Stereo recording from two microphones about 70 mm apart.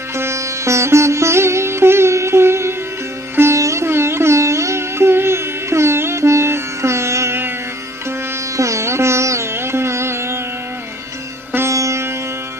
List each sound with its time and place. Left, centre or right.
0.1 s music: right
8.5 s music: right
11.7 s music: right